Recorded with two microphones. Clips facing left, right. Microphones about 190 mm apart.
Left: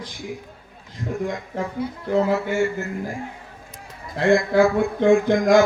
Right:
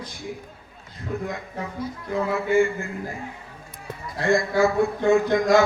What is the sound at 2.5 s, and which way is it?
Speech, 75° left (ahead or behind).